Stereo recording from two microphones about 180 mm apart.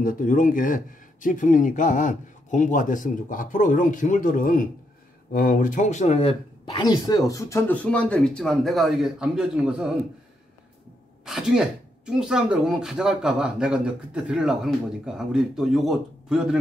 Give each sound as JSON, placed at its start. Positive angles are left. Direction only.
{"t": 0.0, "sound": "speech", "side_deg": 50}
{"t": 11.2, "sound": "speech", "side_deg": -5}